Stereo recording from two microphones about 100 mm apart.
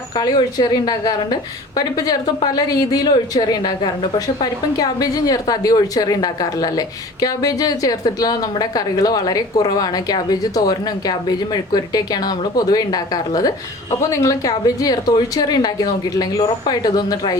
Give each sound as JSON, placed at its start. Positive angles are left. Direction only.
{"t": 0.2, "sound": "a woman's voice", "side_deg": 40}
{"t": 4.8, "sound": "a woman's voice", "side_deg": 40}